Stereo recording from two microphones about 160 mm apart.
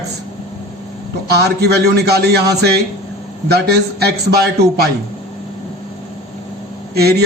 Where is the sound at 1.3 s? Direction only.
90° right.